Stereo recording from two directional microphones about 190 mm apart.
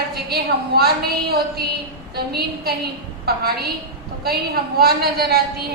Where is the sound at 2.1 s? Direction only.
55° right (ahead or behind).